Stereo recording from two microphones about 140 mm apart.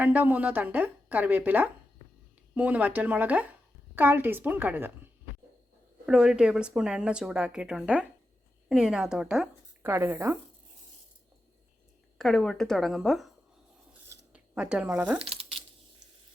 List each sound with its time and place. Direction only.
0.0 s speech: 10° right (ahead or behind)
6.1 s a woman's voice: 5° right (ahead or behind)
9.8 s speech: 15° right (ahead or behind)
12.1 s a woman's voice: 5° left (ahead or behind)
13.9 s a sound: 20° right (ahead or behind)
14.3 s speech: 10° right (ahead or behind)
15.2 s a sound: 40° right (ahead or behind)